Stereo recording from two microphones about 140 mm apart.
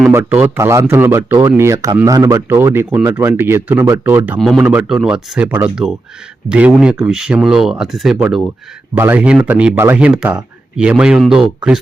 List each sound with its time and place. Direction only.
0.1 s speech: 15° right (ahead or behind)
4.4 s speech: centre (ahead or behind)
9.0 s speech: 10° right (ahead or behind)